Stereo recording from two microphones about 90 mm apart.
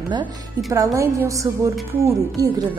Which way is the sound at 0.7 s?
35° right (ahead or behind).